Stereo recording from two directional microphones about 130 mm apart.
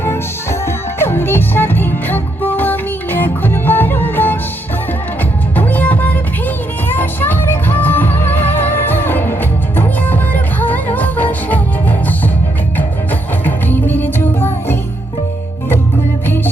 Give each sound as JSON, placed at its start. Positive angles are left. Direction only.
{"t": 0.6, "sound": "music", "side_deg": 20}
{"t": 5.5, "sound": "music", "side_deg": 10}
{"t": 13.4, "sound": "music", "side_deg": 15}